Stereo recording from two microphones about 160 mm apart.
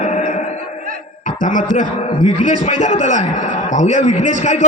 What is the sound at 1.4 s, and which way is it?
Speech, 55° left (ahead or behind).